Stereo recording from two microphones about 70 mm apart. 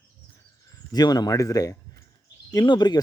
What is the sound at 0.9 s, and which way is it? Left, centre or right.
Speech, left.